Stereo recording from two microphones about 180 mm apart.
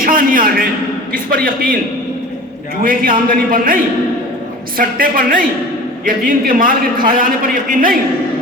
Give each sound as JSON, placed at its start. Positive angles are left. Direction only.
{"t": 0.0, "sound": "a man's voice", "side_deg": -50}
{"t": 2.8, "sound": "a man's voice", "side_deg": -50}
{"t": 4.8, "sound": "a man's voice", "side_deg": -50}